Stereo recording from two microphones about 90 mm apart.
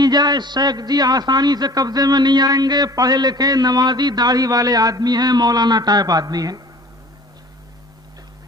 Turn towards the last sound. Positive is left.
turn(degrees=-45)  # may be behind; listen again after turning